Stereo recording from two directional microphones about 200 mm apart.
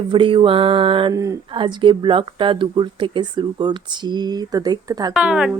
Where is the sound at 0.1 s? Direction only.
25° right (ahead or behind).